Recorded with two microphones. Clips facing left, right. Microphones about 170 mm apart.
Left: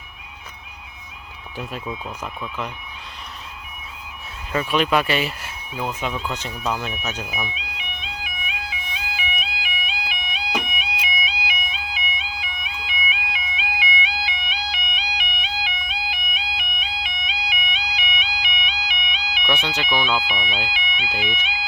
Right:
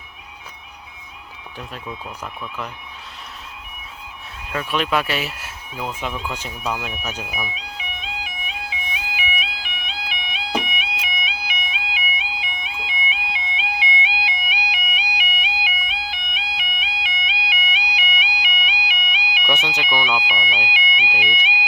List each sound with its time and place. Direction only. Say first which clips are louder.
1.5 s speech: left 3 dB; 5° left (ahead or behind)
4.4 s speech: left 2 dB; centre (ahead or behind)
7.5 s music: right 2 dB; 40° right (ahead or behind)
8.9 s music: right 1 dB; 15° right (ahead or behind)
9.4 s music: left 1 dB; 5° left (ahead or behind)
16.0 s music: left 1 dB; 5° left (ahead or behind); by 21.5 s 10° right (ahead or behind)